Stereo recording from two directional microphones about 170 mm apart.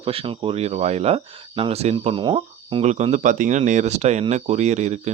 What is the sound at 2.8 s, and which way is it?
Speech, 40° right (ahead or behind).